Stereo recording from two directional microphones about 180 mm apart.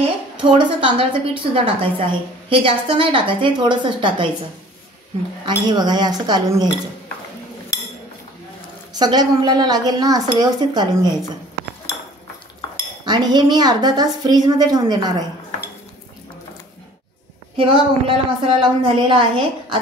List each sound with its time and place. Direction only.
0.0 s a woman's voice: 25° right (ahead or behind)
5.7 s a woman's voice: 25° right (ahead or behind)
8.9 s a woman's voice: 20° right (ahead or behind)
13.0 s a woman's voice: 25° right (ahead or behind)
17.6 s a woman's voice: 30° right (ahead or behind)